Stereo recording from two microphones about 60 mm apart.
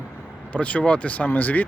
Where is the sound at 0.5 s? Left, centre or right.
Left.